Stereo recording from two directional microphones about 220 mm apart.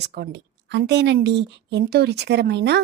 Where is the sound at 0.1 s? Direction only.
50° right (ahead or behind).